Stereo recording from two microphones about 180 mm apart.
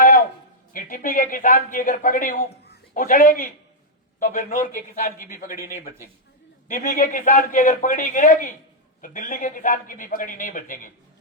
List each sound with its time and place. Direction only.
0.7 s a man's voice: 50° left (ahead or behind)
6.7 s a man's voice: 45° left (ahead or behind)